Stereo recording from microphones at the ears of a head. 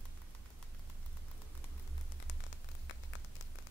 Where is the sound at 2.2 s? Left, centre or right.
Left.